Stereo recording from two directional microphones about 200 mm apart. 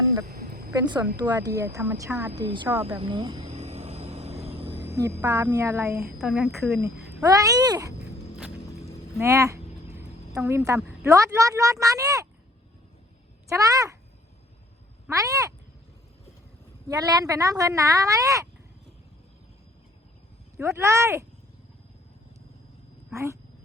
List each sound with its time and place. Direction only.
0.3 s a sound: 55° right (ahead or behind)
0.7 s speech: 20° right (ahead or behind)
3.5 s vehicle: 35° right (ahead or behind)
4.8 s speech: 15° right (ahead or behind)
6.0 s a woman's voice: centre (ahead or behind)
6.8 s speech: 15° right (ahead or behind)
9.2 s speech: 15° right (ahead or behind)
10.0 s a sound: 15° right (ahead or behind)
11.0 s speech: 15° right (ahead or behind)
13.5 s speech: 15° right (ahead or behind)
15.0 s speech: 15° right (ahead or behind)
16.9 s speech: 20° right (ahead or behind)
20.6 s speech: 15° right (ahead or behind)
23.1 s speech: 15° right (ahead or behind)